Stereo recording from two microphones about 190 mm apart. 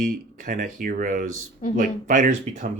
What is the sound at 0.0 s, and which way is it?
Speech, 45° right (ahead or behind).